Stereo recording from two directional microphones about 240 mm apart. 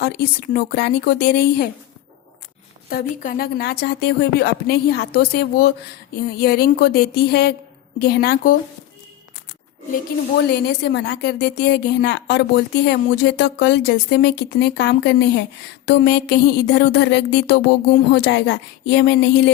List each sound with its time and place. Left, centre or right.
0.0 s speech: left
2.9 s speech: left
10.5 s music: left